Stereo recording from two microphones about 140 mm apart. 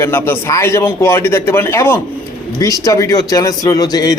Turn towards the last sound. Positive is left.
turn(degrees=25)  # may be behind; listen again after turning